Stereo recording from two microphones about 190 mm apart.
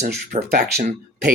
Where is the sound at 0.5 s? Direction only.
55° right (ahead or behind).